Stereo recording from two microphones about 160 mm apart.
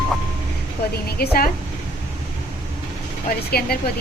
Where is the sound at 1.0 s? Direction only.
75° left (ahead or behind).